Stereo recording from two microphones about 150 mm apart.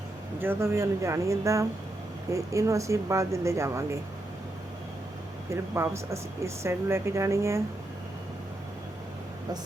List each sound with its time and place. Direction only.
0.3 s speech: 15° right (ahead or behind)
5.5 s speech: 20° right (ahead or behind)